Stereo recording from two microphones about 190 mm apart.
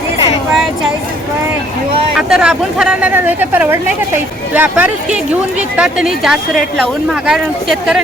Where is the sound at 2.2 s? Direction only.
5° right (ahead or behind).